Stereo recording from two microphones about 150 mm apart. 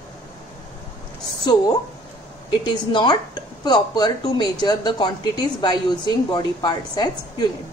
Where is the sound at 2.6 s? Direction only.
30° left (ahead or behind).